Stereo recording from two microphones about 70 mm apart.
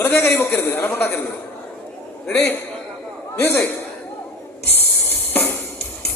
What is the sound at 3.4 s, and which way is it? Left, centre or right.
Speech, left.